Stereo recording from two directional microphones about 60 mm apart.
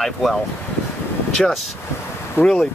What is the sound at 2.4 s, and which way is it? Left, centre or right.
Speech, left.